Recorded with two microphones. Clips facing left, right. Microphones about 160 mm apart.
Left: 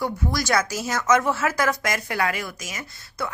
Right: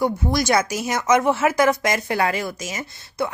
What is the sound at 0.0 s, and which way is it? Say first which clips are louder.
A woman's voice: right 5 dB; 25° right (ahead or behind).